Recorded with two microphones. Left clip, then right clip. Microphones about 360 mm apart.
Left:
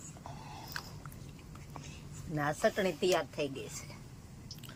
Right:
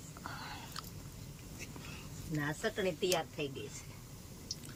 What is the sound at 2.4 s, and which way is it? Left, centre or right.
Speech, centre.